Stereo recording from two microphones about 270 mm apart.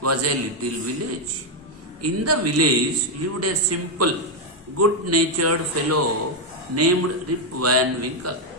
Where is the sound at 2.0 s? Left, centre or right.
Right.